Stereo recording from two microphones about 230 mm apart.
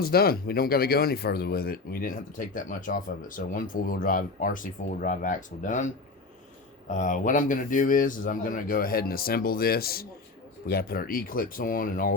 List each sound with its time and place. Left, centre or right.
0.0 s speech: left